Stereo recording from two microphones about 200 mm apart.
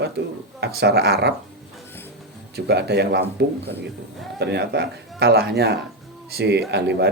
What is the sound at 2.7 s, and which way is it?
A man's voice, 55° right (ahead or behind).